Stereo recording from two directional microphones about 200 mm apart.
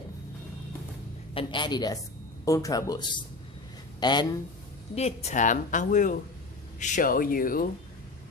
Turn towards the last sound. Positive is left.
turn(degrees=45)  # may be behind; listen again after turning